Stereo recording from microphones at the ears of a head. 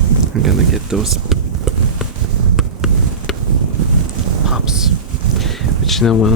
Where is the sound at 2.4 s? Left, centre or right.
Right.